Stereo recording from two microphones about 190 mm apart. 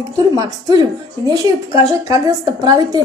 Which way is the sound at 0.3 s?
20° right (ahead or behind).